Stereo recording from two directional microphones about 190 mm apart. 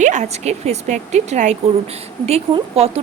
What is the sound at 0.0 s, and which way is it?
Speech, 40° right (ahead or behind).